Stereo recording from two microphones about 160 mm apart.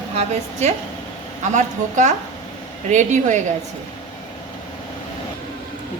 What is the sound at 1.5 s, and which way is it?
A woman's voice, 50° right (ahead or behind).